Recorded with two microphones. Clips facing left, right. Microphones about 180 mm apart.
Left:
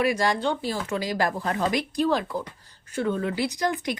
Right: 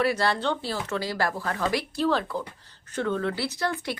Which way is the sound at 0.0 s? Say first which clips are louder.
Left 1 dB; 15° left (ahead or behind).